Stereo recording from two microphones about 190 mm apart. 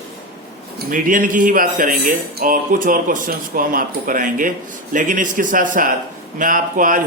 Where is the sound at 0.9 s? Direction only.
45° right (ahead or behind).